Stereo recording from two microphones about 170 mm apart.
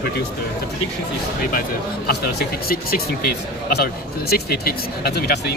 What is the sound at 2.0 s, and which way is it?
Speech, 60° left (ahead or behind).